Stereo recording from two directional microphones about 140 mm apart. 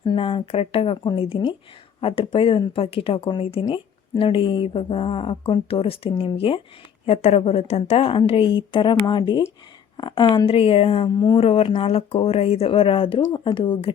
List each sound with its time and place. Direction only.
0.0 s a woman's voice: 35° left (ahead or behind)
11.3 s a woman's voice: 45° left (ahead or behind)